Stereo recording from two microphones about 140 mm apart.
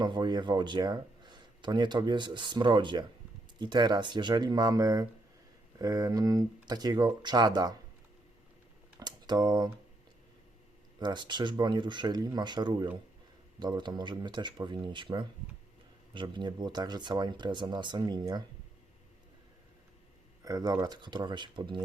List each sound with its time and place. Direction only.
0.0 s speech: 30° right (ahead or behind)
9.0 s a sound: 30° right (ahead or behind)
11.0 s speech: 30° right (ahead or behind)
20.4 s speech: 25° right (ahead or behind)